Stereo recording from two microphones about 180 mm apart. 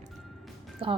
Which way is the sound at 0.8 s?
30° right (ahead or behind).